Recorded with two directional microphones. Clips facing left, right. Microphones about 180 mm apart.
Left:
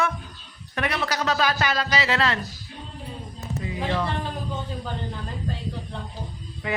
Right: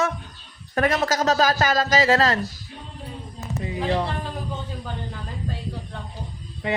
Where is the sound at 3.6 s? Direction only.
35° right (ahead or behind).